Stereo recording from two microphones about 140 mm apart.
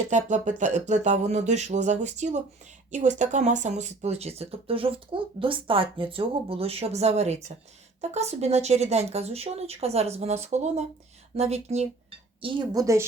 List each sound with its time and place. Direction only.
0.1 s a sound: 60° right (ahead or behind)
2.9 s speech: 60° right (ahead or behind)
12.4 s speech: 35° right (ahead or behind)
12.7 s a woman's voice: 25° right (ahead or behind)